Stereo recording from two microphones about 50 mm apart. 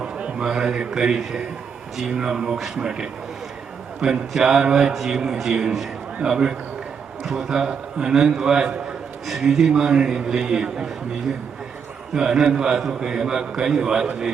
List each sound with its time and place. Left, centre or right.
0.0 s a man's voice: right
2.7 s a man's voice: centre
8.1 s a man's voice: centre
12.1 s a man's voice: centre